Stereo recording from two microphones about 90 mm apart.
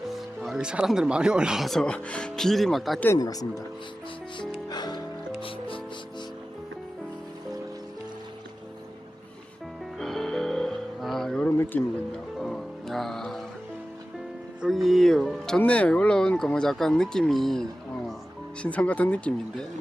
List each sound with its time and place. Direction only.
0.1 s speech: 5° right (ahead or behind)
3.2 s speech: 40° left (ahead or behind)
4.4 s music: 50° left (ahead or behind)
5.4 s music: 80° left
10.0 s music: 5° left (ahead or behind)
11.4 s a sound: 20° left (ahead or behind)
12.4 s music: 5° left (ahead or behind)
14.7 s speech: centre (ahead or behind)
18.6 s speech: 15° left (ahead or behind)